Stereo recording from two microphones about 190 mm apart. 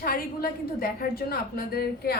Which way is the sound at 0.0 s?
50° left (ahead or behind).